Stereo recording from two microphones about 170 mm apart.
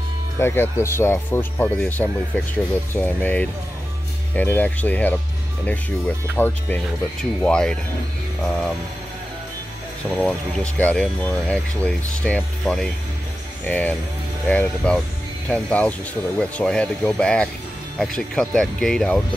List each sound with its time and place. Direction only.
0.4 s speech: 15° left (ahead or behind)
10.1 s speech: 5° left (ahead or behind)